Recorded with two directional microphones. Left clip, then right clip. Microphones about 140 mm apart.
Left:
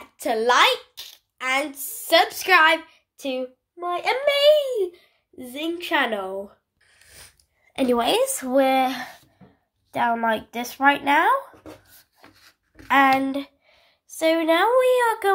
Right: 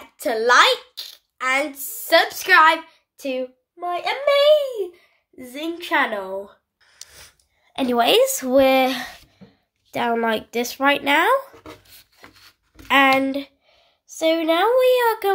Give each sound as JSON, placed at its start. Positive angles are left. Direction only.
{"t": 0.0, "sound": "a woman's voice", "side_deg": 0}
{"t": 3.9, "sound": "a child's voice", "side_deg": 40}
{"t": 4.5, "sound": "a child's voice", "side_deg": 10}
{"t": 5.4, "sound": "a woman's voice", "side_deg": 0}
{"t": 6.9, "sound": "a sound", "side_deg": 0}
{"t": 8.0, "sound": "speech", "side_deg": -25}
{"t": 12.8, "sound": "a woman's voice", "side_deg": -25}